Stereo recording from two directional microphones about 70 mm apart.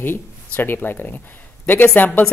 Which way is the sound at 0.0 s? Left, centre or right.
Left.